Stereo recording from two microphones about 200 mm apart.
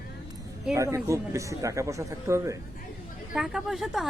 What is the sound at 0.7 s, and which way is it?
A man's voice, 15° right (ahead or behind).